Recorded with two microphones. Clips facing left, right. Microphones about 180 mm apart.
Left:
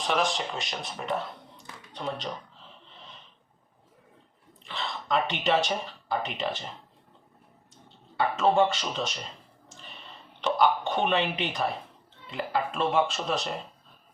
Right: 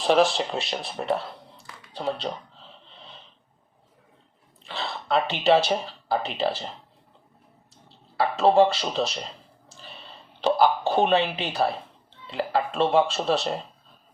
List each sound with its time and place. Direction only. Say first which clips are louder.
0.1 s speech: right 8 dB; 35° right (ahead or behind)
1.9 s a sound: right 5 dB; 30° right (ahead or behind)
4.6 s speech: right 3 dB; 35° right (ahead or behind)
7.9 s a man's voice: right 3 dB; 35° right (ahead or behind)